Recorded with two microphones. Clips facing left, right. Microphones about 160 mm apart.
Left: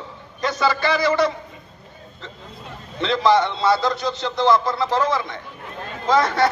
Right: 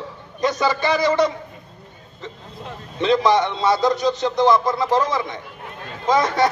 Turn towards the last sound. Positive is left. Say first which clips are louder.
# even
turn(degrees=-15)  # may be behind; listen again after turning